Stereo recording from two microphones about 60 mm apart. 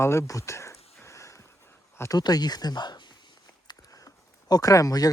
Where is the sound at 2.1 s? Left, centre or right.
Left.